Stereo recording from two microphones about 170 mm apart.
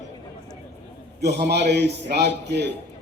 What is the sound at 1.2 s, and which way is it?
A man's voice, 75° right (ahead or behind).